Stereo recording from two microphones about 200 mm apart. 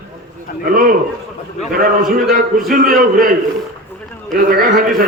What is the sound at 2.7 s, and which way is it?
Speech, 45° right (ahead or behind).